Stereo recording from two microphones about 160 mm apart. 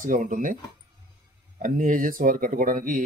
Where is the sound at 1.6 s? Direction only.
55° right (ahead or behind).